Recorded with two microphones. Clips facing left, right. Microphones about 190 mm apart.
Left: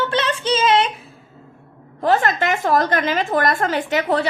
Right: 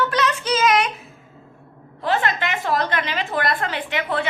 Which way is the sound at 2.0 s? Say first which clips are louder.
Left 4 dB; 45° left (ahead or behind).